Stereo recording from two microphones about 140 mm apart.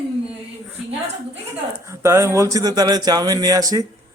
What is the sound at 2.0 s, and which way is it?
A man's voice, 20° right (ahead or behind).